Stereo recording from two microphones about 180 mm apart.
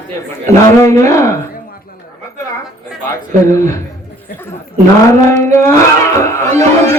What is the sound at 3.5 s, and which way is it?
Speech, 15° left (ahead or behind).